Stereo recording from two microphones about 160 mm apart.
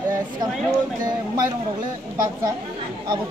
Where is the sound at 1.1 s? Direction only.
25° right (ahead or behind).